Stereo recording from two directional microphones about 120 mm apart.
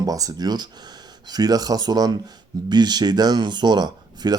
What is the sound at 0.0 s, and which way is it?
Speech, 30° right (ahead or behind).